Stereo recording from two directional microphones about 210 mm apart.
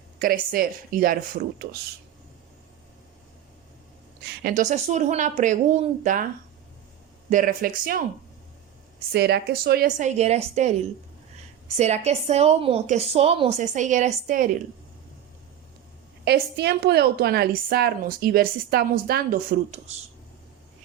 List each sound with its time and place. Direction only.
0.2 s a woman's voice: 45° right (ahead or behind)
4.2 s a woman's voice: 50° right (ahead or behind)
7.3 s a woman's voice: 40° right (ahead or behind)
9.1 s a woman's voice: 50° right (ahead or behind)
16.2 s a woman's voice: 50° right (ahead or behind)